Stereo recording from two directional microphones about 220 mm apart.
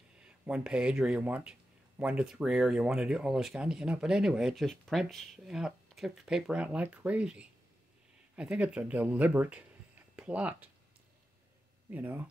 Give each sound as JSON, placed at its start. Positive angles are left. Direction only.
{"t": 0.2, "sound": "speech", "side_deg": -5}
{"t": 11.9, "sound": "speech", "side_deg": -10}